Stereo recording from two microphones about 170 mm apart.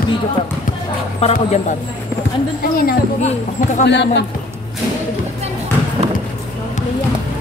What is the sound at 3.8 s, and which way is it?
Speech, 85° left.